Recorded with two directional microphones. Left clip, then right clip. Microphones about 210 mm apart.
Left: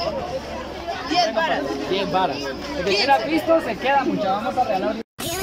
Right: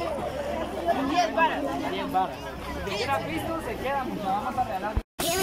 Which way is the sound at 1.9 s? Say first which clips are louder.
Left 8 dB; 55° left (ahead or behind).